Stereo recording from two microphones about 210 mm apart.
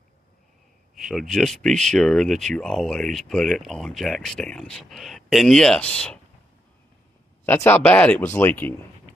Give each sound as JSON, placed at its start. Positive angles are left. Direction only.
{"t": 0.9, "sound": "speech", "side_deg": 0}
{"t": 7.4, "sound": "speech", "side_deg": 10}